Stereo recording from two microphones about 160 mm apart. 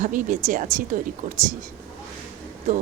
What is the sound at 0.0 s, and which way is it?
Speech, 55° right (ahead or behind).